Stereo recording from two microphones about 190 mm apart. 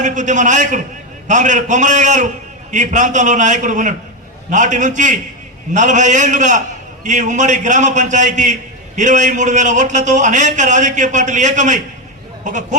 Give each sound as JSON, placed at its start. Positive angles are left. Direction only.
{"t": 0.0, "sound": "a man's voice", "side_deg": -40}